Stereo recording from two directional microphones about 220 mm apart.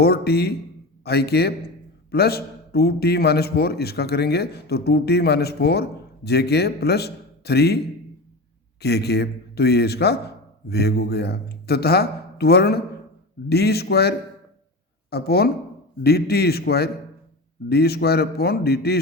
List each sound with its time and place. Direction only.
0.0 s a man's voice: 45° left (ahead or behind)
8.8 s a man's voice: 50° left (ahead or behind)
15.1 s a man's voice: 45° left (ahead or behind)